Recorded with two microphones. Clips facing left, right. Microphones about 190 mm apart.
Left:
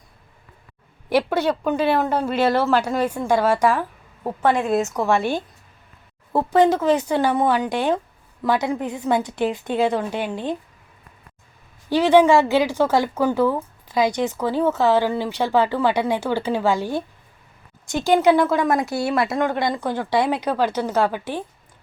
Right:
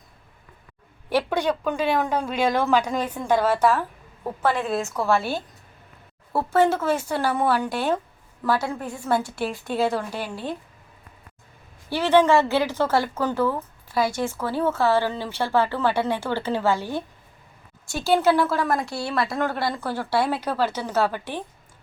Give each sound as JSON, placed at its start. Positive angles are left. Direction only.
{"t": 1.1, "sound": "a woman's voice", "side_deg": 5}
{"t": 11.9, "sound": "a woman's voice", "side_deg": 15}
{"t": 18.6, "sound": "speech", "side_deg": 0}
{"t": 19.4, "sound": "a woman's voice", "side_deg": 15}